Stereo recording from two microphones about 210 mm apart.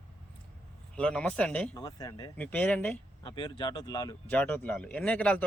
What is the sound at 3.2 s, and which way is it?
Speech, 20° left (ahead or behind).